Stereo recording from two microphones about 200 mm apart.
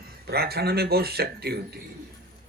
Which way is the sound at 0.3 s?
50° right (ahead or behind).